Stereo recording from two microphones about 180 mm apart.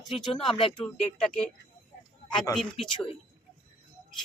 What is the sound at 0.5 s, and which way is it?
Speech, 30° left (ahead or behind).